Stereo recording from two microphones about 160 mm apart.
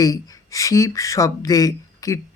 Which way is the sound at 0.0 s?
20° left (ahead or behind).